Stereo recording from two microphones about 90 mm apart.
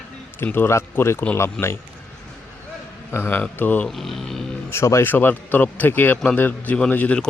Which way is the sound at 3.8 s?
Centre (ahead or behind).